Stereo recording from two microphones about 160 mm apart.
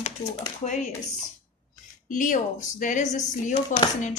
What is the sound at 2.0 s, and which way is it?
Speech, 55° left (ahead or behind).